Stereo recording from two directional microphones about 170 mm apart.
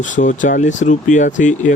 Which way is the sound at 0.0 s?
50° left (ahead or behind).